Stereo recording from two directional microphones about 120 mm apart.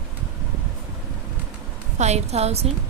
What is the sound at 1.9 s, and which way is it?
Speech, 70° right (ahead or behind).